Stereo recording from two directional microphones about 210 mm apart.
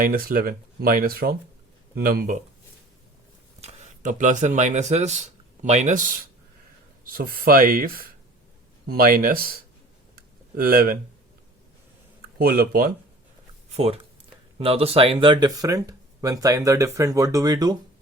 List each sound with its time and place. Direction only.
0.0 s speech: 40° right (ahead or behind)
3.6 s speech: 35° right (ahead or behind)
7.0 s speech: 45° right (ahead or behind)
10.2 s a sound: 45° right (ahead or behind)
12.4 s speech: 45° right (ahead or behind)
13.7 s speech: 30° right (ahead or behind)